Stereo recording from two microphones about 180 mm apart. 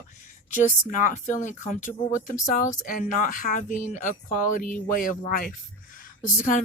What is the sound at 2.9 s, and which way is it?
Speech, 45° left (ahead or behind).